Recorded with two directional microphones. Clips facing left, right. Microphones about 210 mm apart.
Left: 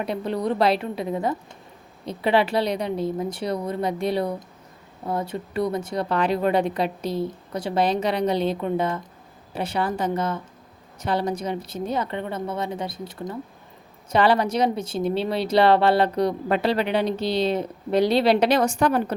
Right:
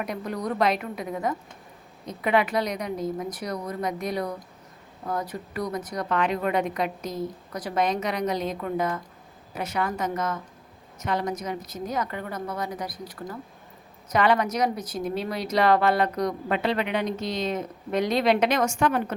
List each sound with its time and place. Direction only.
0.0 s speech: 30° left (ahead or behind)